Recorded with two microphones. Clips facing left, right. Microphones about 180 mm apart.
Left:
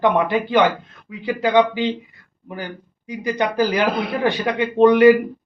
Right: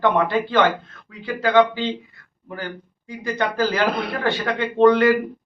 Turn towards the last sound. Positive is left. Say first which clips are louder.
# left 3 dB
turn(degrees=15)  # may be behind; listen again after turning